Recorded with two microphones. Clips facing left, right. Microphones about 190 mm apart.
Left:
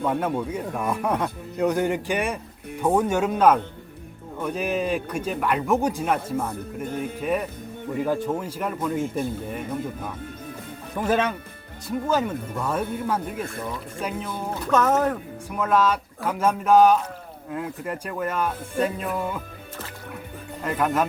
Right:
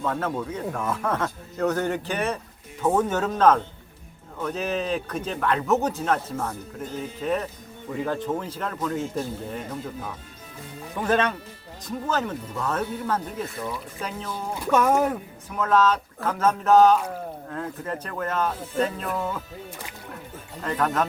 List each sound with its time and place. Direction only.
0.0 s speech: 10° left (ahead or behind)
6.8 s speech: 55° left (ahead or behind)
7.2 s speech: 10° left (ahead or behind)
11.0 s speech: 10° left (ahead or behind)
14.5 s speech: 10° right (ahead or behind)
15.4 s speech: 10° left (ahead or behind)
20.7 s speech: 10° left (ahead or behind)